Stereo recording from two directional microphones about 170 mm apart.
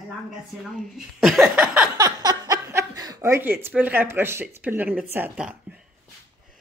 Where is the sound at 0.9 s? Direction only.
Centre (ahead or behind).